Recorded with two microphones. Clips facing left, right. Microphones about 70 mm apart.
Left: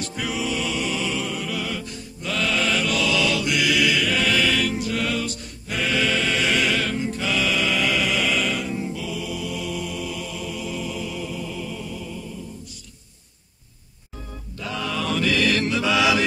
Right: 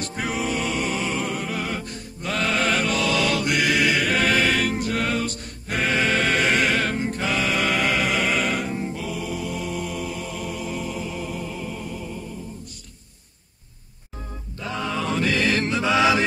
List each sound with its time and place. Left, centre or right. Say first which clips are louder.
0.0 s music: right 1 dB; right
14.6 s mantra: right 1 dB; right